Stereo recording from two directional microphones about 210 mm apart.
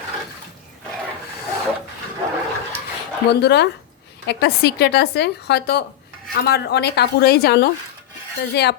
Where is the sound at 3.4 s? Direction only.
55° left (ahead or behind).